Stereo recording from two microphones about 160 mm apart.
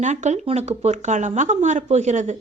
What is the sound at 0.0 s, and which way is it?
A woman's voice, 45° right (ahead or behind).